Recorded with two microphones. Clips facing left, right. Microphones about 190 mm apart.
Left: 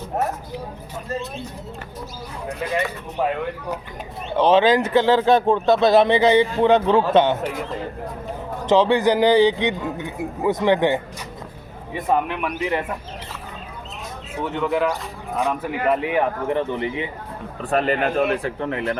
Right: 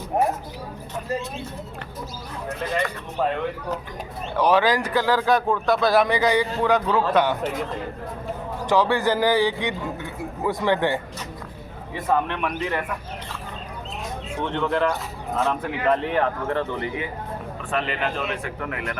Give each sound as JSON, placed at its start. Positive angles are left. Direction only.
{"t": 2.5, "sound": "a man's voice", "side_deg": 15}
{"t": 4.4, "sound": "speech", "side_deg": 25}
{"t": 8.6, "sound": "a man's voice", "side_deg": 20}
{"t": 14.3, "sound": "a man's voice", "side_deg": 5}
{"t": 17.6, "sound": "speech", "side_deg": 40}
{"t": 18.6, "sound": "speech", "side_deg": 30}